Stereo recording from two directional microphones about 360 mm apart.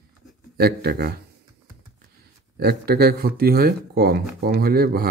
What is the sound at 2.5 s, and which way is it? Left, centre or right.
Speech, right.